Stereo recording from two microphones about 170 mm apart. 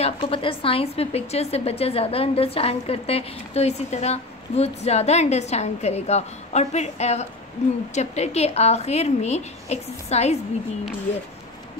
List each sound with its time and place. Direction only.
0.0 s a woman's voice: 30° left (ahead or behind)